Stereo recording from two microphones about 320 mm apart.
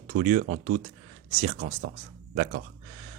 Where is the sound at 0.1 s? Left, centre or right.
Right.